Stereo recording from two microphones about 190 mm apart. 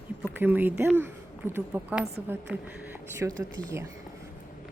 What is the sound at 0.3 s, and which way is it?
Speech, 10° right (ahead or behind).